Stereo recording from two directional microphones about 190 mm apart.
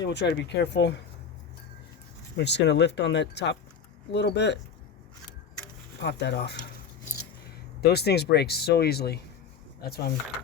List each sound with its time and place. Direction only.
0.0 s speech: 65° left (ahead or behind)
2.3 s speech: 65° left (ahead or behind)
6.0 s speech: 65° left (ahead or behind)
7.8 s speech: 60° left (ahead or behind)